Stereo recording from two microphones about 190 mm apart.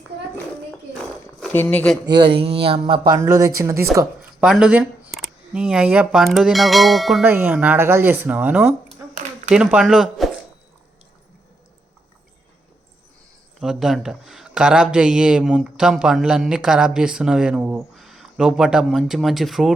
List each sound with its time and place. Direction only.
1.4 s speech: 5° left (ahead or behind)
2.0 s speech: 25° right (ahead or behind)
3.2 s speech: 15° right (ahead or behind)
13.6 s speech: centre (ahead or behind)